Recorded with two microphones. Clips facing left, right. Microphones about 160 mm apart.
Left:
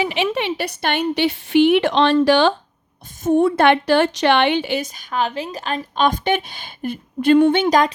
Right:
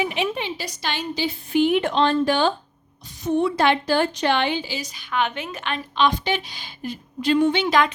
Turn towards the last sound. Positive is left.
turn(degrees=40)  # may be behind; listen again after turning